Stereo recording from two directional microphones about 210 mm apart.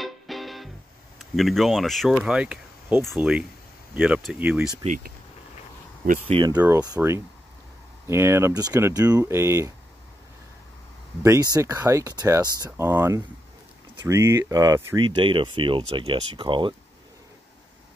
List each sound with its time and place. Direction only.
0.0 s music: centre (ahead or behind)
1.3 s speech: centre (ahead or behind)
6.2 s speech: 25° right (ahead or behind)
6.5 s speech: 10° right (ahead or behind)
11.2 s speech: 15° right (ahead or behind)